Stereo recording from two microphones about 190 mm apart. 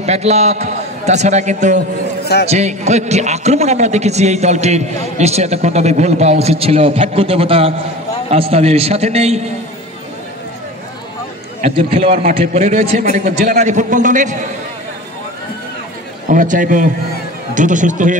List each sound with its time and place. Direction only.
0.0 s a man's voice: 35° right (ahead or behind)
11.6 s a man's voice: 30° right (ahead or behind)
16.3 s a man's voice: 45° right (ahead or behind)